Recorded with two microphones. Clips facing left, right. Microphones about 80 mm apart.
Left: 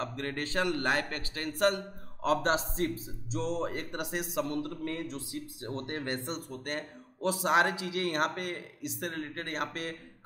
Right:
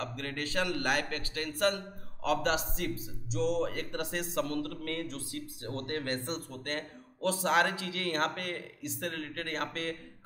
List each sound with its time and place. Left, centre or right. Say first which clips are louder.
0.0 s speech: left 2 dB; left